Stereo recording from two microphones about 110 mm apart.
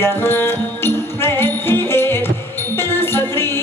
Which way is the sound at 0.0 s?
20° left (ahead or behind).